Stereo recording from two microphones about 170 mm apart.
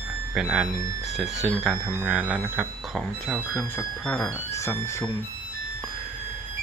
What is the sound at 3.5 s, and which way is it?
Speech, 15° left (ahead or behind).